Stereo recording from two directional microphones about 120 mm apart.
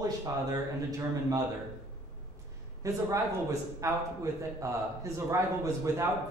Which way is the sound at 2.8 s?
25° right (ahead or behind).